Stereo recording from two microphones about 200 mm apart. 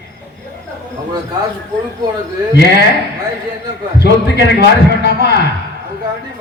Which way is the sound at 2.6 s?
55° left (ahead or behind).